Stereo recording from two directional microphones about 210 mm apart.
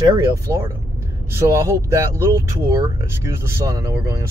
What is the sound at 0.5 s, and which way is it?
Speech, 15° right (ahead or behind).